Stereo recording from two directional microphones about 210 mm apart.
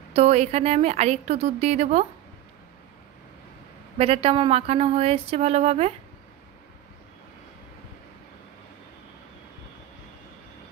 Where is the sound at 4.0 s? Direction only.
25° right (ahead or behind).